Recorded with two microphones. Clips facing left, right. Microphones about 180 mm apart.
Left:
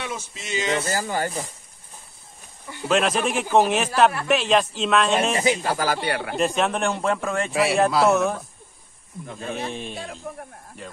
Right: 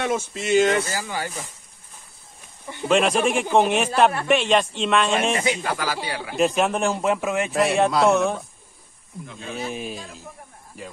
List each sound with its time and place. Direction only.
0.0 s speech: 55° right (ahead or behind)
0.9 s speech: 45° left (ahead or behind)
2.9 s speech: centre (ahead or behind)
5.3 s speech: 30° left (ahead or behind)
6.0 s speech: 60° left (ahead or behind)
6.3 s speech: centre (ahead or behind)
9.3 s speech: 40° left (ahead or behind)
9.7 s speech: 5° right (ahead or behind)